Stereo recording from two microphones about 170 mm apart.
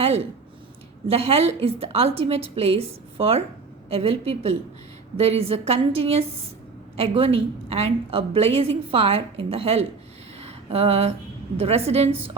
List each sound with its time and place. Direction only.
1.0 s a woman's voice: 35° right (ahead or behind)
10.4 s a sound: 35° right (ahead or behind)
11.5 s a woman's voice: 35° right (ahead or behind)